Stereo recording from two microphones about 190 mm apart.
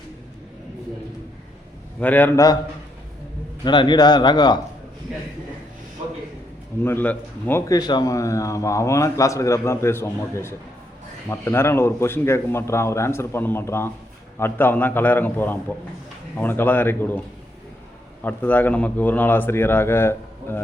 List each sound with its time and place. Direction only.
2.0 s speech: 10° left (ahead or behind)
3.6 s speech: 25° left (ahead or behind)
6.8 s speech: 10° left (ahead or behind)